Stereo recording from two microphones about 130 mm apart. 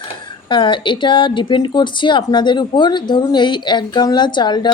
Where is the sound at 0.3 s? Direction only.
35° left (ahead or behind).